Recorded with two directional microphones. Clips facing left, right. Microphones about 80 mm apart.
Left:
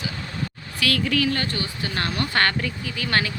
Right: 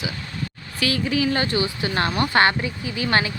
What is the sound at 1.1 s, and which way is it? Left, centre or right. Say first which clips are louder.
Speech: right 2 dB; centre.